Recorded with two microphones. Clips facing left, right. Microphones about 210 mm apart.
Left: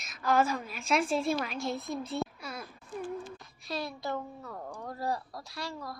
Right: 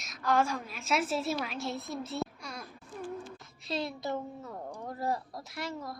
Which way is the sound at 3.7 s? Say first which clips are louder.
Right 1 dB; 20° right (ahead or behind).